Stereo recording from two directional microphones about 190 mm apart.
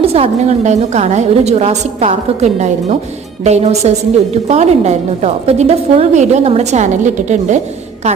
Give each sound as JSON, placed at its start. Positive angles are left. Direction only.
{"t": 0.0, "sound": "a woman's voice", "side_deg": -30}